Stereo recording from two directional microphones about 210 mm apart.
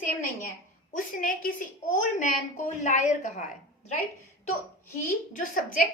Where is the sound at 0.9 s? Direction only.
40° left (ahead or behind).